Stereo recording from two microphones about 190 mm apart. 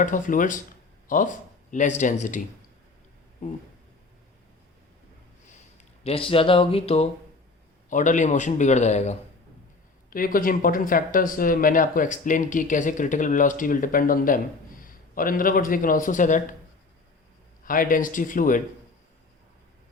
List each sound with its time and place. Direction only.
0.0 s speech: 45° left (ahead or behind)
5.5 s a man's voice: 35° left (ahead or behind)
10.1 s speech: 50° left (ahead or behind)
17.7 s speech: 45° left (ahead or behind)